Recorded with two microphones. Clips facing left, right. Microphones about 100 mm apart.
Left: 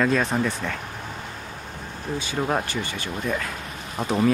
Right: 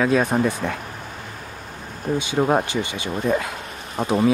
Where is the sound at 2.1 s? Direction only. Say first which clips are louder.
Right 7 dB; 45° right (ahead or behind).